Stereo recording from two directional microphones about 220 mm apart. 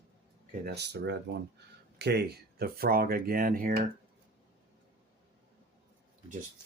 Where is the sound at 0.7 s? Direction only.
50° right (ahead or behind).